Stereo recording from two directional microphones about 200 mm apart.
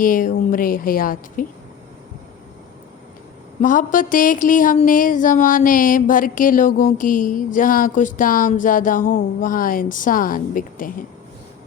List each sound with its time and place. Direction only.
0.0 s speech: 45° left (ahead or behind)
3.6 s speech: 40° left (ahead or behind)